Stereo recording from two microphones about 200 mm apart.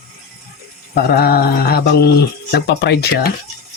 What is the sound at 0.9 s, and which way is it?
Speech, 50° left (ahead or behind).